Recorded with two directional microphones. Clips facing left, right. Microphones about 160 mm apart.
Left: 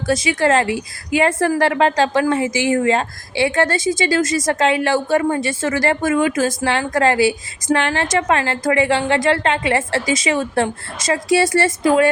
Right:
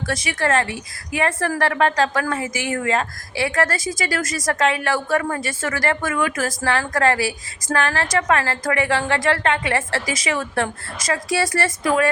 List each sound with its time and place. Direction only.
0.1 s a woman's voice: 25° left (ahead or behind)